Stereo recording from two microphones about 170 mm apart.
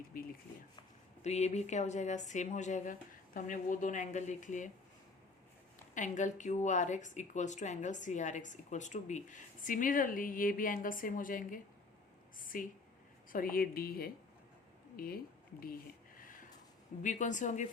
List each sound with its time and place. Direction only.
1.2 s speech: 40° left (ahead or behind)
5.9 s a woman's voice: 45° left (ahead or behind)
15.6 s a sound: 55° left (ahead or behind)
17.0 s speech: 45° left (ahead or behind)